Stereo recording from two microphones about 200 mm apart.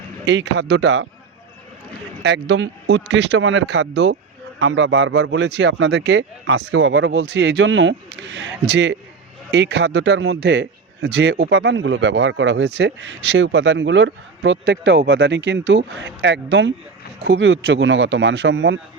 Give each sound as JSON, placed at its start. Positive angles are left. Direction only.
{"t": 0.3, "sound": "a man's voice", "side_deg": -60}
{"t": 2.2, "sound": "a man's voice", "side_deg": -60}